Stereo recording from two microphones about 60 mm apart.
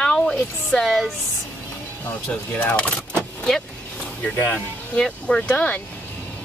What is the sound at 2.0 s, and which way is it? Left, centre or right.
Speech, left.